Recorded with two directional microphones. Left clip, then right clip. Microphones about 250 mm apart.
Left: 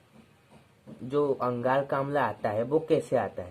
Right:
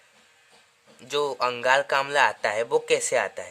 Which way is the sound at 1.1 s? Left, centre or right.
Right.